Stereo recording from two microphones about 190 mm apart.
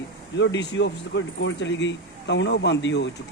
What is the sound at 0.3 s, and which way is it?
A man's voice, 70° left (ahead or behind).